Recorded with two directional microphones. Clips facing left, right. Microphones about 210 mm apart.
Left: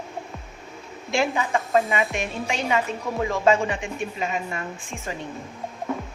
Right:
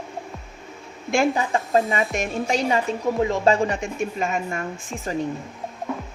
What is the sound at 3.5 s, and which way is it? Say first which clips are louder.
Speech: right 1 dB; 40° right (ahead or behind).